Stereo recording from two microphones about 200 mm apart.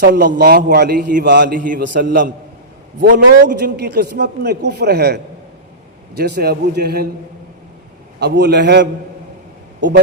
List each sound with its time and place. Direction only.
0.0 s a man's voice: 60° right (ahead or behind)
0.3 s a man's voice: 45° right (ahead or behind)
3.2 s a man's voice: 60° right (ahead or behind)
8.2 s a man's voice: 55° right (ahead or behind)